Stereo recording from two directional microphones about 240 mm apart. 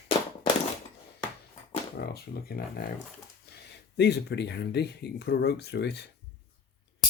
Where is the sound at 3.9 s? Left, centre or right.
Left.